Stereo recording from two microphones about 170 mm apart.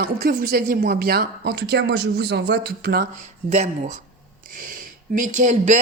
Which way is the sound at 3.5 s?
45° right (ahead or behind).